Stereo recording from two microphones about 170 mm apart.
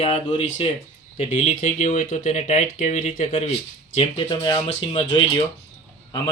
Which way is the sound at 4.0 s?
30° left (ahead or behind).